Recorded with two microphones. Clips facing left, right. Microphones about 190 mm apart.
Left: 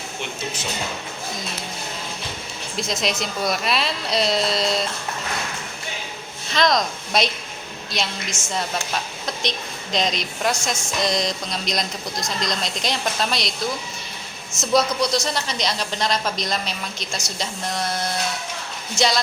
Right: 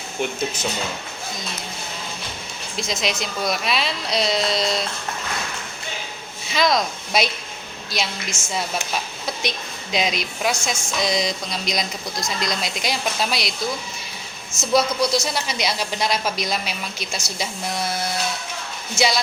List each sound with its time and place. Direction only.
2.7 s a woman's voice: centre (ahead or behind)
6.5 s a woman's voice: 5° right (ahead or behind)
14.6 s a woman's voice: centre (ahead or behind)
18.9 s a woman's voice: 5° right (ahead or behind)